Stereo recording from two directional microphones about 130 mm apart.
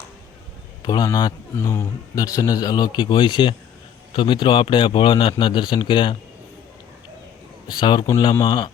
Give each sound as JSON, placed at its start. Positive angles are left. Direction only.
{"t": 0.9, "sound": "a man's voice", "side_deg": 30}
{"t": 7.7, "sound": "a man's voice", "side_deg": 35}